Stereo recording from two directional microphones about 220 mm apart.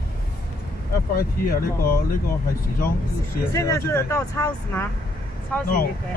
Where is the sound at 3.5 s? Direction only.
15° left (ahead or behind).